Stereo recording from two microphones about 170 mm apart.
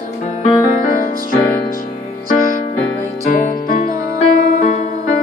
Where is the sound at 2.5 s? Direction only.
20° right (ahead or behind).